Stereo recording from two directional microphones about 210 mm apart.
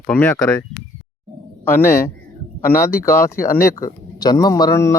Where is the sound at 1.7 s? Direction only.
10° left (ahead or behind).